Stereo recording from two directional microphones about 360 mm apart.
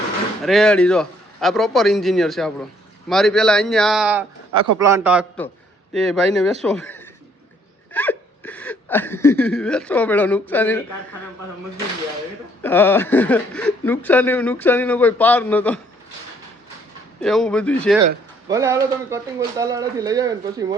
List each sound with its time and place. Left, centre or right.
0.4 s speech: centre
7.9 s a sound: centre
12.6 s speech: centre
17.2 s speech: centre
18.4 s speech: centre